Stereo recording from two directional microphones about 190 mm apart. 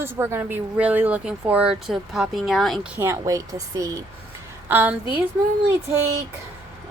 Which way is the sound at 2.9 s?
15° right (ahead or behind).